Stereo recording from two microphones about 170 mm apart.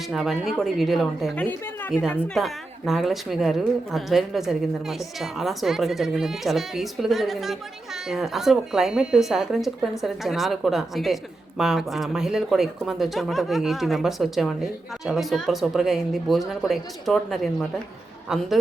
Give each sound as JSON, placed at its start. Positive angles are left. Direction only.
{"t": 0.1, "sound": "speech", "side_deg": 0}
{"t": 2.0, "sound": "speech", "side_deg": 10}